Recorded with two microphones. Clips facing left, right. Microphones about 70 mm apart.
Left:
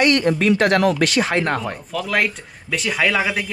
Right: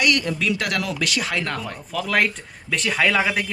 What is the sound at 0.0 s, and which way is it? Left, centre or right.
Speech, left.